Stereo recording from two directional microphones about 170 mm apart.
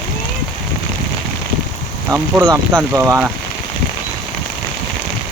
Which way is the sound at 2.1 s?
10° right (ahead or behind).